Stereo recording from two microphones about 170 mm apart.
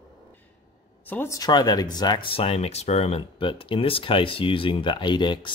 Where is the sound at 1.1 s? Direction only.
15° left (ahead or behind).